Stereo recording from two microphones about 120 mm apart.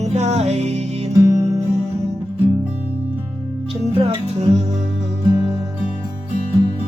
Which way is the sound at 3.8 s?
55° right (ahead or behind).